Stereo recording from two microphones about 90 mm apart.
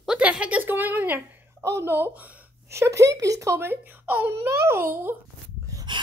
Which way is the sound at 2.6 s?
30° right (ahead or behind).